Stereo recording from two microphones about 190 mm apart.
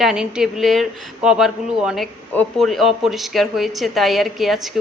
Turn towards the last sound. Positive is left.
turn(degrees=0)  # may be behind; listen again after turning